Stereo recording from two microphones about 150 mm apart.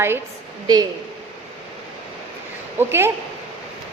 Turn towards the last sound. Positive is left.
turn(degrees=-15)  # may be behind; listen again after turning